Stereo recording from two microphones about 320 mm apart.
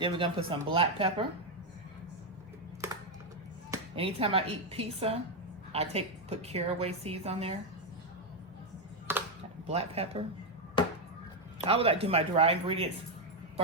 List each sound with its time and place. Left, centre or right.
0.0 s speech: centre
3.7 s a woman's voice: centre
9.1 s a sound: centre
9.6 s a woman's voice: centre
11.6 s a woman's voice: centre